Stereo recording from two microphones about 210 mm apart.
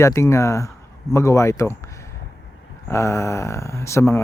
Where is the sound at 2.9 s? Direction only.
15° left (ahead or behind).